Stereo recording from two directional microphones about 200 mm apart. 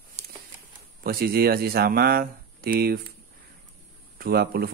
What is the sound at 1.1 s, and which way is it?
Speech, 50° right (ahead or behind).